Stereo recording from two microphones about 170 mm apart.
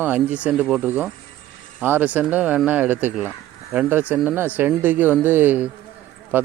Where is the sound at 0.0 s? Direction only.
10° right (ahead or behind).